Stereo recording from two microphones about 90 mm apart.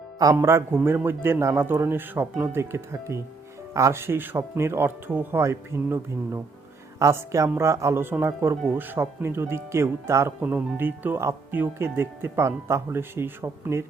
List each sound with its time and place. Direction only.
0.4 s speech: 30° right (ahead or behind)